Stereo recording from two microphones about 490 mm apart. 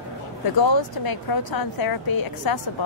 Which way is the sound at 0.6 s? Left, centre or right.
Left.